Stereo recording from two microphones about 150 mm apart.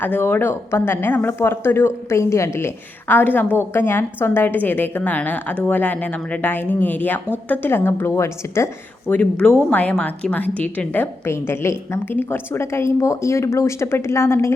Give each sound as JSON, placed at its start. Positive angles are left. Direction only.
{"t": 0.0, "sound": "speech", "side_deg": 10}